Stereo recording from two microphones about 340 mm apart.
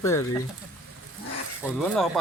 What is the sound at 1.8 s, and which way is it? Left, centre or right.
Speech, centre.